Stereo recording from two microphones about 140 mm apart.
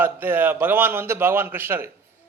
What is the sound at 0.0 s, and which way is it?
A man's voice, 15° right (ahead or behind).